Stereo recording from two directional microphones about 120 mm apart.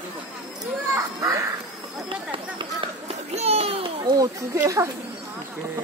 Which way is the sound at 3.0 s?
60° right (ahead or behind).